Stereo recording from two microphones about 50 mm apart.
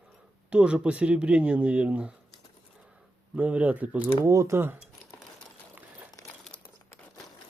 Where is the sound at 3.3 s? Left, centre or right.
Right.